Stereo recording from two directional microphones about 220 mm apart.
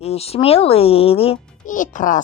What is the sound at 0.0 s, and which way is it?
A child's voice, 25° left (ahead or behind).